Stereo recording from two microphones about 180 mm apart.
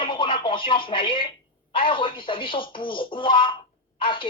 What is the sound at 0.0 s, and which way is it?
Speech, 30° left (ahead or behind).